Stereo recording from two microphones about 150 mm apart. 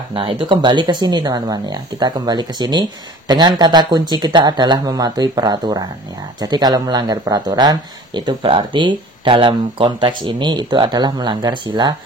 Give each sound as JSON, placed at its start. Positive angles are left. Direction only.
{"t": 0.1, "sound": "speech", "side_deg": -35}